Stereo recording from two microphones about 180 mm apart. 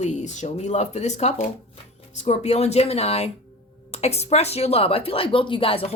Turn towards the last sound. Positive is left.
turn(degrees=30)  # may be behind; listen again after turning